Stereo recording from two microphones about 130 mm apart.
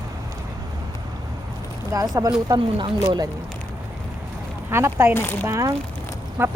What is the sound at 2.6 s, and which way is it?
Speech, 40° right (ahead or behind).